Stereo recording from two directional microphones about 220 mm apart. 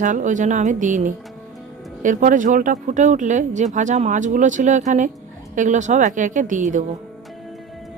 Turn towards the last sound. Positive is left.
turn(degrees=-35)  # may be behind; listen again after turning